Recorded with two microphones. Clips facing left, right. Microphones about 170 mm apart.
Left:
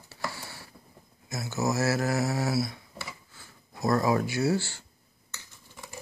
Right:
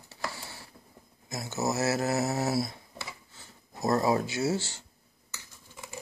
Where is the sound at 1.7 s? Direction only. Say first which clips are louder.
Even; 20° right (ahead or behind).